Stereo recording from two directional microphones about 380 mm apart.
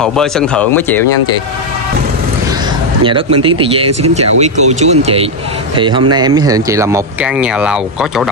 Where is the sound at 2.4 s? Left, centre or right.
Centre.